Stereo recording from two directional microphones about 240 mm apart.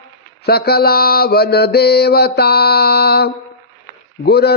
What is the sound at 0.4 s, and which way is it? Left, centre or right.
Mantra, left.